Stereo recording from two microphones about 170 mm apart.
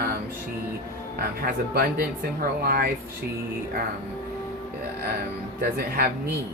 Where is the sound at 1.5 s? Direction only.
60° right (ahead or behind).